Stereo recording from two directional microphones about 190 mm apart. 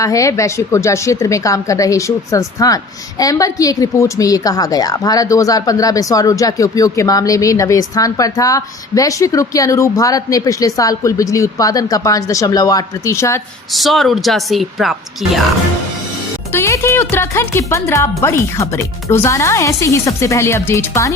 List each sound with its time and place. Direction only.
0.0 s a woman's voice: 15° left (ahead or behind)
13.7 s speech: centre (ahead or behind)
16.5 s a woman's voice: 15° left (ahead or behind)